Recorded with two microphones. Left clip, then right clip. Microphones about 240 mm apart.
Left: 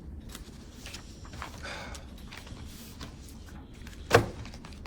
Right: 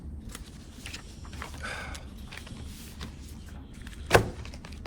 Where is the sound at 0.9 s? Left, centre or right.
Right.